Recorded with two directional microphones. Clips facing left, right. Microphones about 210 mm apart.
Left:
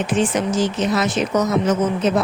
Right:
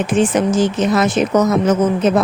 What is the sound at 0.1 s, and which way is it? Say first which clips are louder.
Speech: right 5 dB; 50° right (ahead or behind).